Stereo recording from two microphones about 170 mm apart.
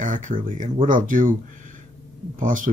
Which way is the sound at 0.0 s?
50° right (ahead or behind).